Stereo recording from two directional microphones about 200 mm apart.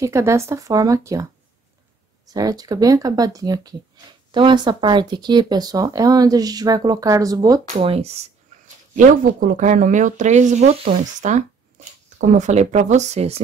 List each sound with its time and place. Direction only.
0.0 s speech: 15° right (ahead or behind)
2.3 s speech: 20° right (ahead or behind)
7.7 s speech: 30° right (ahead or behind)